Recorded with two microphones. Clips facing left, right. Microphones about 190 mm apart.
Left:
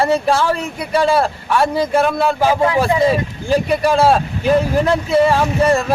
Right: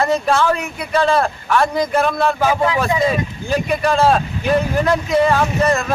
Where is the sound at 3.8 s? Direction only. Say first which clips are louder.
Left 1 dB; 10° left (ahead or behind).